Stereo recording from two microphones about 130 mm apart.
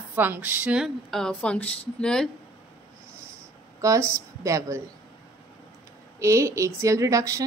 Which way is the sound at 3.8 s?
25° right (ahead or behind).